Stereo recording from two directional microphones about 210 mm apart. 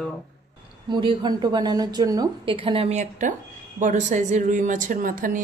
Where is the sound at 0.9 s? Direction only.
20° right (ahead or behind); by 5.4 s 40° right (ahead or behind).